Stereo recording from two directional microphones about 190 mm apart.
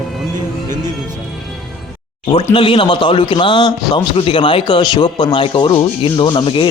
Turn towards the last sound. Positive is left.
turn(degrees=25)  # may be behind; listen again after turning